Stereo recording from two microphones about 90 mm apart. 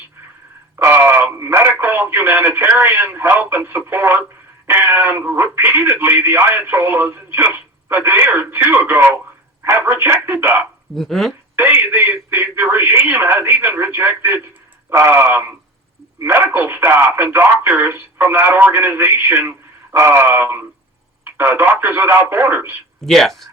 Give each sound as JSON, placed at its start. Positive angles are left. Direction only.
{"t": 0.8, "sound": "speech", "side_deg": -25}
{"t": 10.9, "sound": "speech", "side_deg": 0}
{"t": 11.5, "sound": "speech", "side_deg": -25}
{"t": 23.0, "sound": "speech", "side_deg": 5}